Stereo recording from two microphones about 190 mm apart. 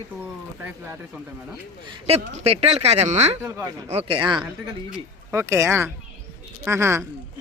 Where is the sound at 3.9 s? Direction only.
30° right (ahead or behind).